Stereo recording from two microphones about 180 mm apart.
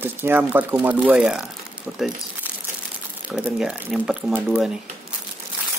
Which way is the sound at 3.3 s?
5° right (ahead or behind).